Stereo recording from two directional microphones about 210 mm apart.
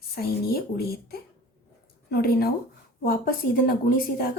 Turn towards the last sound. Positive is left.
turn(degrees=40)  # may be behind; listen again after turning